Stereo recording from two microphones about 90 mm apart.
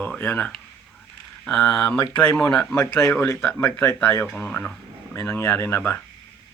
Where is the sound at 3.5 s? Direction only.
25° left (ahead or behind).